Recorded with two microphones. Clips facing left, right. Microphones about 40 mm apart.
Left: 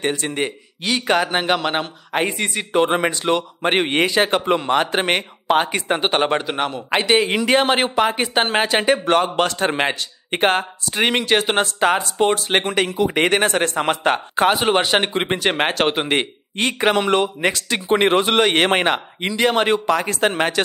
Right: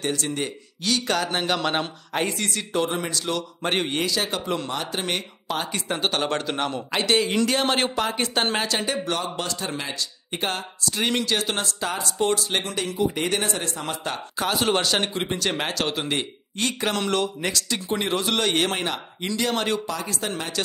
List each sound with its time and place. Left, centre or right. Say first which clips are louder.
0.1 s speech: left 4 dB; left
1.6 s a man's voice: left 3 dB; centre
2.1 s a man's voice: left 5 dB; left
8.5 s a man's voice: left 8 dB; left
12.9 s speech: left 5 dB; left
14.5 s a man's voice: left 2 dB; left
19.2 s a man's voice: left 7 dB; left
19.9 s speech: left 10 dB; left